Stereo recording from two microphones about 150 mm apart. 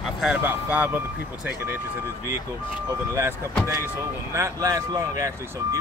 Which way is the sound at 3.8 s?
20° right (ahead or behind).